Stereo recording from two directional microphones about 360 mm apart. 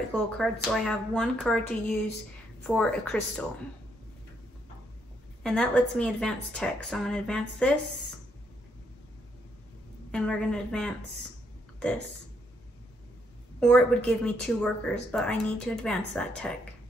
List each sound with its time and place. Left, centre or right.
0.1 s speech: centre
2.6 s speech: centre
5.4 s speech: centre
10.1 s speech: centre
13.6 s speech: centre